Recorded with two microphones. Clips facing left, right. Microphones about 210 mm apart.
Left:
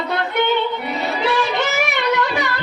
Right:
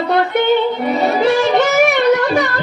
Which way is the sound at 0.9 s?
50° right (ahead or behind).